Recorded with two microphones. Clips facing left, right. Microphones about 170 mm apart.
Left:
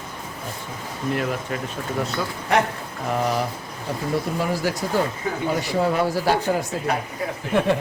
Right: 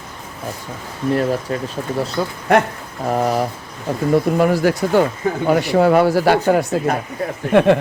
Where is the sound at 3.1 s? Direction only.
45° right (ahead or behind).